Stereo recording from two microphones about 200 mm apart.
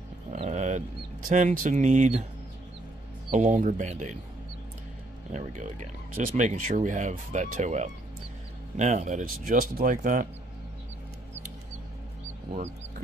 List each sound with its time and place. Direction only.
0.3 s a sound: 35° right (ahead or behind)
1.3 s speech: 40° right (ahead or behind)
3.3 s speech: 35° right (ahead or behind)
5.3 s speech: 35° right (ahead or behind)